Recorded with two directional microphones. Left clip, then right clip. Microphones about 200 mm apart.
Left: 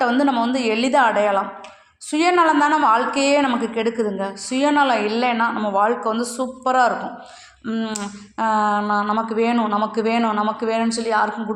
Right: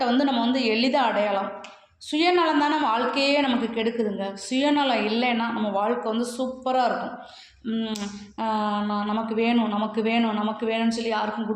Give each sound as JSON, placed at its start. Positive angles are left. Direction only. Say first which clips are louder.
{"t": 0.2, "sound": "a woman's voice", "louder": "left 4 dB", "side_deg": 25}